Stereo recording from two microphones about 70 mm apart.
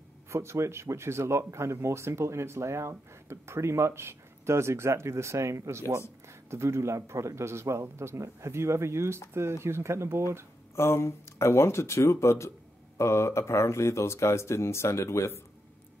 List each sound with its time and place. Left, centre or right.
0.3 s speech: right
10.8 s speech: left